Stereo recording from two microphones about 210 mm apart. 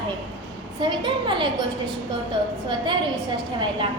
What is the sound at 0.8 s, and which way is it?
Speech, 20° right (ahead or behind).